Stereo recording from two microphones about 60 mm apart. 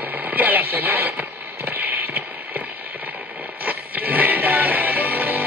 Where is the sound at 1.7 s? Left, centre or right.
Right.